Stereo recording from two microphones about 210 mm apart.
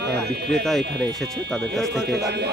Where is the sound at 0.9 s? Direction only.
55° right (ahead or behind).